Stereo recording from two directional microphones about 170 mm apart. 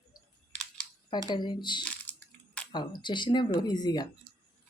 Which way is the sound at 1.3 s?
25° left (ahead or behind).